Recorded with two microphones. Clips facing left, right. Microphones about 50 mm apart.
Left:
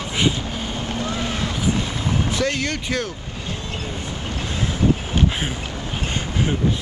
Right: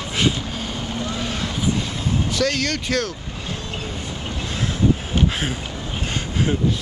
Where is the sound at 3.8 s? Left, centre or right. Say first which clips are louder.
Left 1 dB; centre.